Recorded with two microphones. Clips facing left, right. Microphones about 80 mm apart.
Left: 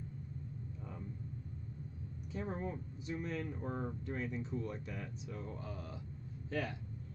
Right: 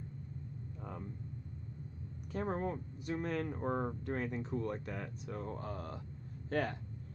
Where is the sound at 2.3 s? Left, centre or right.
Right.